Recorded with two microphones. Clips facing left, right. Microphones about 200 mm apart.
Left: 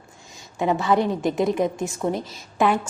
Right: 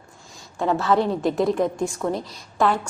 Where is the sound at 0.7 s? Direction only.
Centre (ahead or behind).